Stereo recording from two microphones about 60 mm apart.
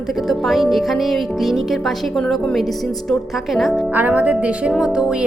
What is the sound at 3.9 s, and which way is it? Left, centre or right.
A woman's voice, right.